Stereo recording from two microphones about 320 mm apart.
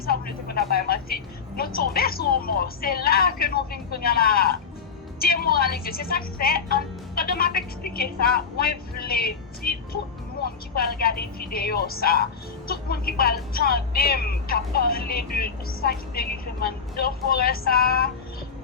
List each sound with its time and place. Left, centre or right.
0.0 s a woman's voice: left